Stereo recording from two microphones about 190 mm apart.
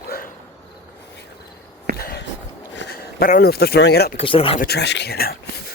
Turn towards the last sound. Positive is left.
turn(degrees=55)  # may be behind; listen again after turning